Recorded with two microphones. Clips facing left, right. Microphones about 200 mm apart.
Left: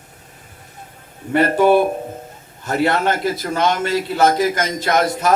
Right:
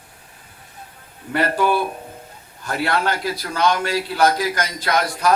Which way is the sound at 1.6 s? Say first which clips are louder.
Left 8 dB; 45° left (ahead or behind).